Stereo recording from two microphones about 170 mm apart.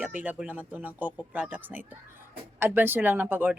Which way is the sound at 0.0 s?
10° right (ahead or behind).